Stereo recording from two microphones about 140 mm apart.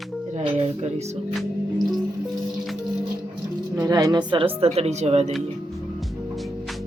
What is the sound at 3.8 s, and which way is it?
Speech, 30° right (ahead or behind).